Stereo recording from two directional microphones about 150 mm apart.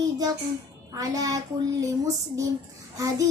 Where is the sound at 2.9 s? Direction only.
25° right (ahead or behind).